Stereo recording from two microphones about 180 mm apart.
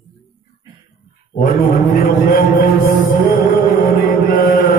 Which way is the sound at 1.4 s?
50° left (ahead or behind).